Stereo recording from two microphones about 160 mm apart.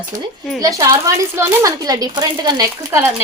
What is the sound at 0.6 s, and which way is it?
A woman's voice, 20° right (ahead or behind).